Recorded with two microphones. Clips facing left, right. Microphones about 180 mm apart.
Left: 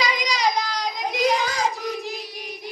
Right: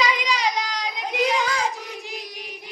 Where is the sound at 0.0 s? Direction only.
40° left (ahead or behind).